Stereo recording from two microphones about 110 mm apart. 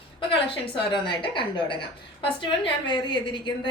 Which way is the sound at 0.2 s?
50° left (ahead or behind).